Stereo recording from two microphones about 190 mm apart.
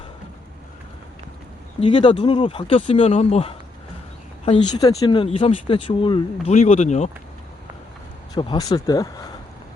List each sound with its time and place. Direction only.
1.8 s speech: 30° left (ahead or behind)
8.4 s speech: 20° left (ahead or behind)